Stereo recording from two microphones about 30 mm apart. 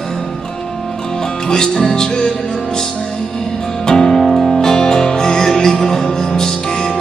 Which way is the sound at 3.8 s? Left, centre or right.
Centre.